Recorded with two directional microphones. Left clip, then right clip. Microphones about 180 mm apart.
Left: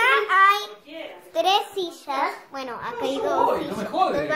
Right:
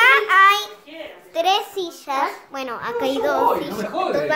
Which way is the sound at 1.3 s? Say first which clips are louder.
Right 2 dB; 5° right (ahead or behind).